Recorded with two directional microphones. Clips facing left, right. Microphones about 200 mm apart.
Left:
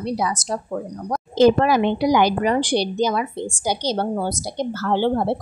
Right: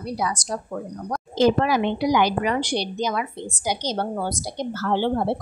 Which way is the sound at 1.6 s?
40° left (ahead or behind).